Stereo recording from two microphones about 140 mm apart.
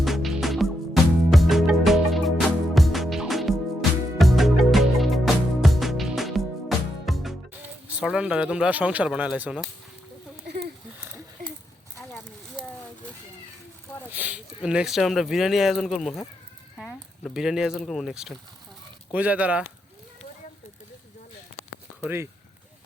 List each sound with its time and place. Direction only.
0.0 s music: centre (ahead or behind)
7.9 s speech: 5° right (ahead or behind)
11.9 s clip-clop: 10° left (ahead or behind)
14.1 s speech: 10° right (ahead or behind)
22.0 s speech: 15° right (ahead or behind)